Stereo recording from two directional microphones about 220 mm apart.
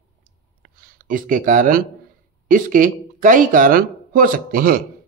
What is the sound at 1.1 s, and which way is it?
Speech, 40° right (ahead or behind).